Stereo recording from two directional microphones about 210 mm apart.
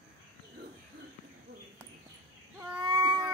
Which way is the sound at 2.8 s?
20° right (ahead or behind).